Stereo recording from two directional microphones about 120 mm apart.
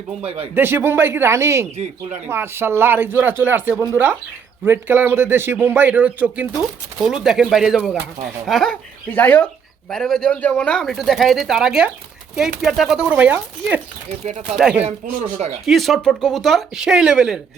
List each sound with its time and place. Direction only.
0.2 s speech: 55° right (ahead or behind)
0.5 s a man's voice: 20° right (ahead or behind)
7.0 s speech: 5° right (ahead or behind)
9.0 s speech: 15° left (ahead or behind)
9.9 s a man's voice: 5° left (ahead or behind)